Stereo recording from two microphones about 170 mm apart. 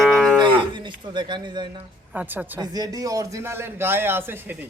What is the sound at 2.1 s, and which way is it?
Speech, 10° right (ahead or behind).